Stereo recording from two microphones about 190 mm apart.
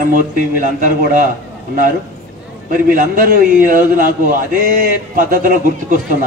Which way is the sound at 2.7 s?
45° right (ahead or behind).